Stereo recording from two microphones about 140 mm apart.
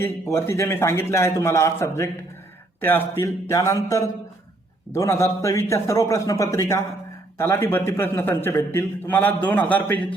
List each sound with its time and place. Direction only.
0.0 s a man's voice: 15° left (ahead or behind)